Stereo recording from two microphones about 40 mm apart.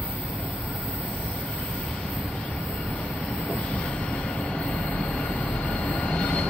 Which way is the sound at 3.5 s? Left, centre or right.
Left.